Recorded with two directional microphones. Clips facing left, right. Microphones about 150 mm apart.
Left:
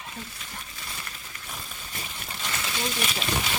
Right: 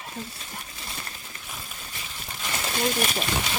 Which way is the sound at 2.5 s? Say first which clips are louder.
Right 6 dB; 40° right (ahead or behind).